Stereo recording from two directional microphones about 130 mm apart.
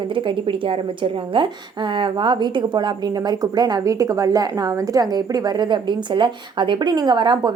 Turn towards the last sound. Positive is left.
turn(degrees=-35)  # may be behind; listen again after turning